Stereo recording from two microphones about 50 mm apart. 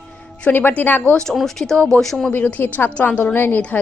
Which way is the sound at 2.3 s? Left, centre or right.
Left.